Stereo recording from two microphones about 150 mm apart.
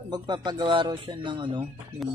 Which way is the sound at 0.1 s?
30° right (ahead or behind).